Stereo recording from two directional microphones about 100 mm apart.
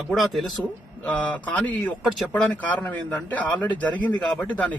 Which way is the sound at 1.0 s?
15° left (ahead or behind).